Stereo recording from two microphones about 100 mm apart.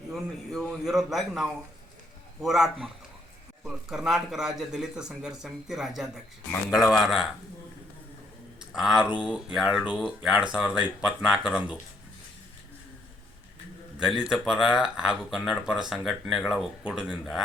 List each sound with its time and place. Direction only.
0.1 s speech: centre (ahead or behind)
8.7 s speech: 5° right (ahead or behind)
14.0 s speech: 5° right (ahead or behind)